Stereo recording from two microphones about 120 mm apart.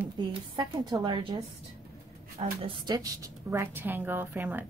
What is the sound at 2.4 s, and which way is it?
Speech, 50° right (ahead or behind).